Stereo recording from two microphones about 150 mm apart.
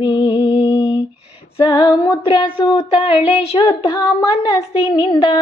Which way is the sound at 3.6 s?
30° left (ahead or behind).